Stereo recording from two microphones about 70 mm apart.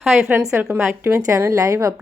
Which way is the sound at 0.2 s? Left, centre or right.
Right.